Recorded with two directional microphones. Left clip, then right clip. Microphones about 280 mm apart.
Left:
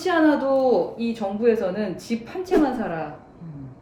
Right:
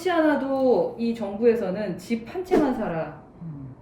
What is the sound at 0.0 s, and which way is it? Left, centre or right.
A woman's voice, centre.